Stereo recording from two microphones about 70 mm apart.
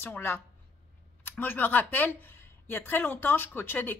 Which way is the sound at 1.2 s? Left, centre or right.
Left.